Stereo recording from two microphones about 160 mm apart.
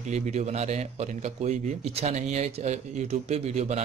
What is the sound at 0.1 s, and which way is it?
A man's voice, 45° right (ahead or behind).